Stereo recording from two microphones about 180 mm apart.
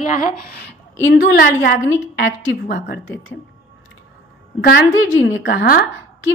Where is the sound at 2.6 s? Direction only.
60° left (ahead or behind).